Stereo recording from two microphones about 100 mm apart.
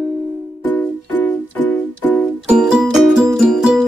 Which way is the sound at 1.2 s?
15° left (ahead or behind).